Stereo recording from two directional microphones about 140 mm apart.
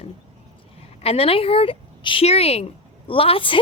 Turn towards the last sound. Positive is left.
turn(degrees=40)  # may be behind; listen again after turning